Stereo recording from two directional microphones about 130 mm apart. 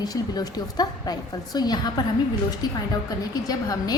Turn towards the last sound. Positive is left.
turn(degrees=30)  # may be behind; listen again after turning